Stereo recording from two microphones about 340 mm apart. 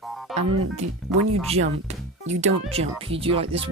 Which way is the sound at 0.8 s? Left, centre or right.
Centre.